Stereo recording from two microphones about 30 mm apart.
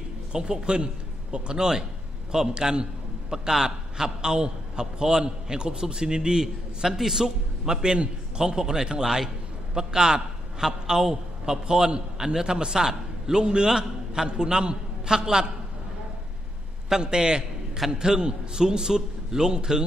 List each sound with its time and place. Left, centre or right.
0.3 s a man's voice: right
16.9 s a man's voice: right